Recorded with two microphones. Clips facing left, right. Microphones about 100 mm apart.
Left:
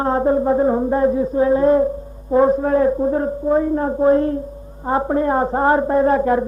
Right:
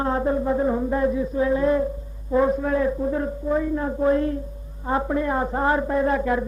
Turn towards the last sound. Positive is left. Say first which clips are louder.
# left 6 dB
turn(degrees=40)  # may be behind; listen again after turning